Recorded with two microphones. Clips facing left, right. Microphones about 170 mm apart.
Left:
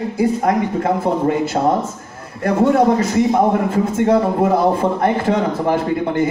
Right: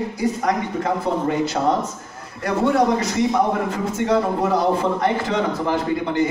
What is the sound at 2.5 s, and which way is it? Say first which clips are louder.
A man's voice: left 4 dB; 50° left (ahead or behind).